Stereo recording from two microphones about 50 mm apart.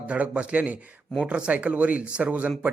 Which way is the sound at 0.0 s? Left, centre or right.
Right.